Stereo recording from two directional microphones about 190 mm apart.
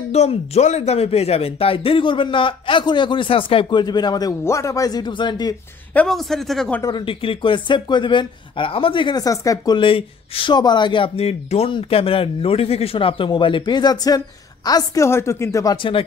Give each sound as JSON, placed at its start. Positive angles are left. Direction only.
{"t": 0.1, "sound": "speech", "side_deg": 35}
{"t": 5.9, "sound": "speech", "side_deg": 0}
{"t": 6.8, "sound": "speech", "side_deg": 20}